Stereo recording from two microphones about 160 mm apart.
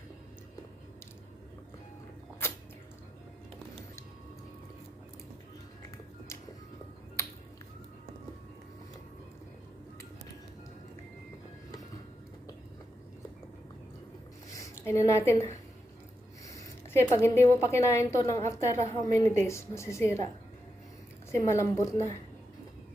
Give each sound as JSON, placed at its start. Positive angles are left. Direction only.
{"t": 14.6, "sound": "a woman's voice", "side_deg": 20}
{"t": 16.5, "sound": "a sound", "side_deg": 20}
{"t": 17.2, "sound": "a woman's voice", "side_deg": 15}
{"t": 21.3, "sound": "a woman's voice", "side_deg": 20}